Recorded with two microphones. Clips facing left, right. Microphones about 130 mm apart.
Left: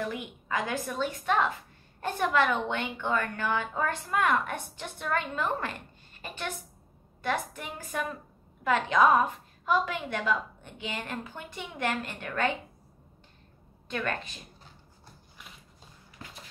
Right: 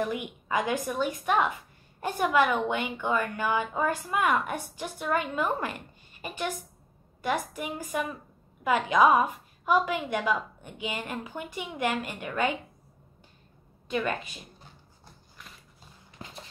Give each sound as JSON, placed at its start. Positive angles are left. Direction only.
{"t": 0.0, "sound": "a woman's voice", "side_deg": -15}
{"t": 13.8, "sound": "a woman's voice", "side_deg": -10}
{"t": 16.2, "sound": "a sound", "side_deg": -25}